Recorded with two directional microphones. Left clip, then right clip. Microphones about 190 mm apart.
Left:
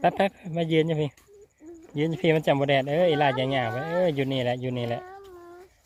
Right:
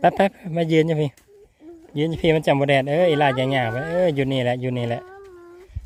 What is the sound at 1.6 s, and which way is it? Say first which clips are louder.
Speech: right 4 dB; 20° right (ahead or behind).